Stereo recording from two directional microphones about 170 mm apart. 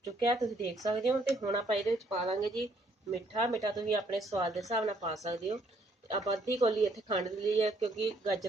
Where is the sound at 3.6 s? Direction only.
20° right (ahead or behind).